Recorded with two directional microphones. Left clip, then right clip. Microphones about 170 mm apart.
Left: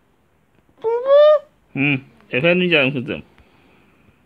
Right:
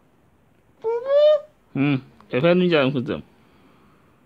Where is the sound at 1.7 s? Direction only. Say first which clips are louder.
Left 4 dB; 15° right (ahead or behind).